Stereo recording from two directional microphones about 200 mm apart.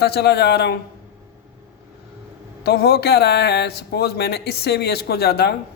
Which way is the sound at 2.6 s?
55° left (ahead or behind).